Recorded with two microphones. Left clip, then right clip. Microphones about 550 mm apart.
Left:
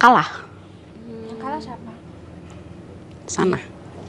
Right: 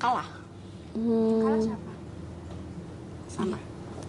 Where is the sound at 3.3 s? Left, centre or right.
Left.